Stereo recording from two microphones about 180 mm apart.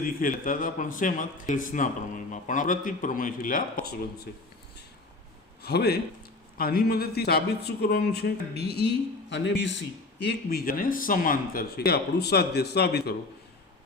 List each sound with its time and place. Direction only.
0.0 s speech: 50° left (ahead or behind)
5.6 s speech: 65° left (ahead or behind)